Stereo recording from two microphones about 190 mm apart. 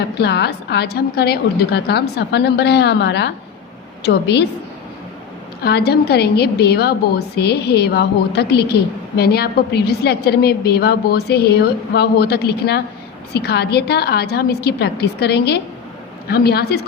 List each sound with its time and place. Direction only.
0.2 s a woman's voice: 60° left (ahead or behind)
5.6 s a woman's voice: 55° left (ahead or behind)